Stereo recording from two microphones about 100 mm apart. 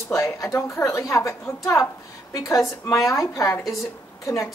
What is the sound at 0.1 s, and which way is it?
A woman's voice, 30° left (ahead or behind).